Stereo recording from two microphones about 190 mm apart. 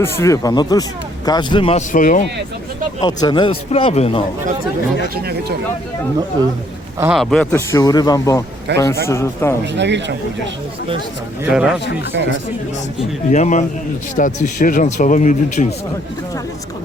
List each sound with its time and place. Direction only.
0.0 s a man's voice: 15° left (ahead or behind)
1.9 s speech: 45° left (ahead or behind)
3.0 s a man's voice: 20° left (ahead or behind)
5.0 s speech: 55° right (ahead or behind)
7.0 s a man's voice: centre (ahead or behind); by 8.4 s 15° left (ahead or behind)
8.7 s speech: 65° right (ahead or behind)
9.0 s a man's voice: 15° left (ahead or behind)
9.7 s speech: 65° right (ahead or behind)
11.4 s speech: 5° right (ahead or behind)
12.1 s speech: 75° right (ahead or behind)
13.3 s a man's voice: 40° left (ahead or behind)